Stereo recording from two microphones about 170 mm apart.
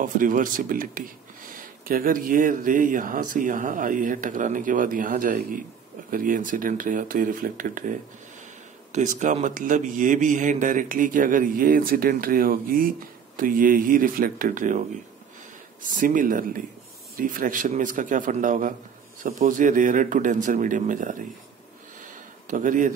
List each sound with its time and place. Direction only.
0.0 s speech: 50° right (ahead or behind)
8.9 s speech: 45° right (ahead or behind)
22.0 s a sound: 50° right (ahead or behind)